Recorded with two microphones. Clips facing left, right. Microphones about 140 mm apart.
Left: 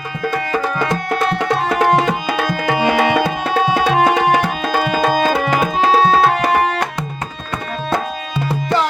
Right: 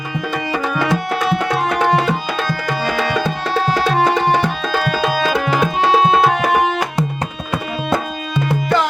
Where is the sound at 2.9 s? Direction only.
60° left (ahead or behind).